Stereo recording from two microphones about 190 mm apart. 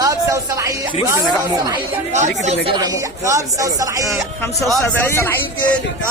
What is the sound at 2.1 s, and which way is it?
Speech, 40° right (ahead or behind).